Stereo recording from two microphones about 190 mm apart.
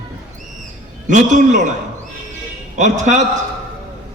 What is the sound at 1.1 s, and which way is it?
Speech, 40° right (ahead or behind).